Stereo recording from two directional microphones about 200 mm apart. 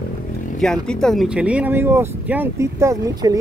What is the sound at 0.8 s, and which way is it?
Speech, 5° left (ahead or behind).